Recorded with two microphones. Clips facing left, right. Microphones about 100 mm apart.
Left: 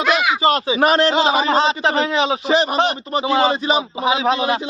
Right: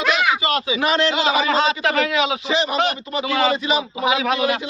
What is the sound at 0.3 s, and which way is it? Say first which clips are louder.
A man's voice: left 5 dB; 35° left (ahead or behind).